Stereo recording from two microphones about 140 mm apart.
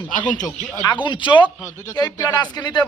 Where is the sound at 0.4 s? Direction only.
5° left (ahead or behind).